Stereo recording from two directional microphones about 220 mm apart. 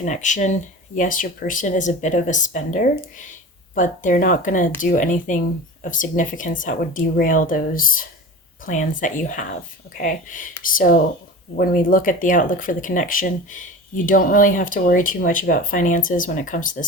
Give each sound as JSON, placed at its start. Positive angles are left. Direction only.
{"t": 0.0, "sound": "speech", "side_deg": 35}